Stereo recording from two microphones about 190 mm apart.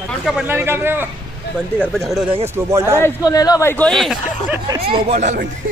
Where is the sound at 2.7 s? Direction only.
15° right (ahead or behind).